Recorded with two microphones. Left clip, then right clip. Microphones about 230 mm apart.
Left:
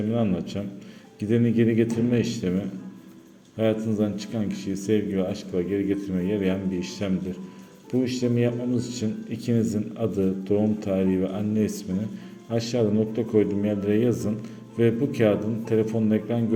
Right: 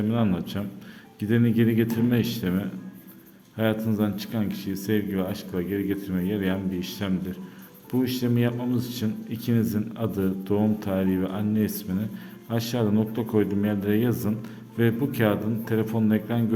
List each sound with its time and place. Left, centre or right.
0.1 s speech: centre